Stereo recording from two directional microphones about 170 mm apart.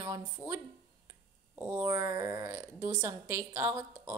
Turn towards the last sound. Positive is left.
turn(degrees=-15)  # may be behind; listen again after turning